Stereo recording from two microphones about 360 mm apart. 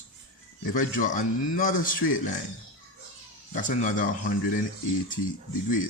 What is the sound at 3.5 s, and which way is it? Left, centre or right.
Speech, left.